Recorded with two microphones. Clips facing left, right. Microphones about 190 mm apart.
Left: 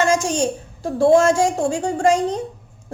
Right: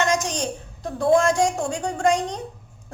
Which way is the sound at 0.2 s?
30° left (ahead or behind).